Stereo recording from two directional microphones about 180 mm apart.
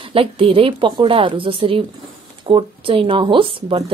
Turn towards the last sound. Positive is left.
turn(degrees=-30)  # may be behind; listen again after turning